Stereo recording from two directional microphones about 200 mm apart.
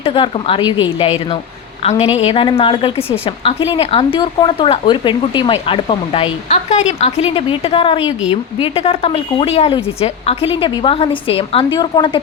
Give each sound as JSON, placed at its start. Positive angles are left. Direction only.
{"t": 0.0, "sound": "speech", "side_deg": 25}